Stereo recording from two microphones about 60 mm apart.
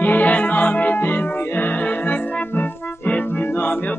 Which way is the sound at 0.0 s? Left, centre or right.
Left.